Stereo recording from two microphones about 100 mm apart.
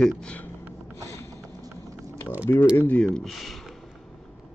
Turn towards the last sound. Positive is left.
turn(degrees=0)  # may be behind; listen again after turning